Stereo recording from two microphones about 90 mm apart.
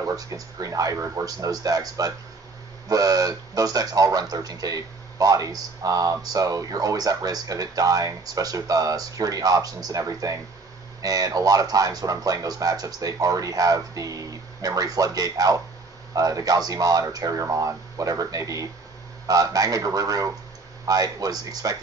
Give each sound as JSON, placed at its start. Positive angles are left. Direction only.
{"t": 0.1, "sound": "speech", "side_deg": -40}